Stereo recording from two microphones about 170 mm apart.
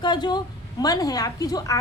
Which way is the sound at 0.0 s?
25° left (ahead or behind).